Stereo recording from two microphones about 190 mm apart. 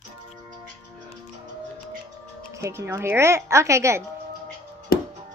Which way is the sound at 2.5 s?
15° right (ahead or behind).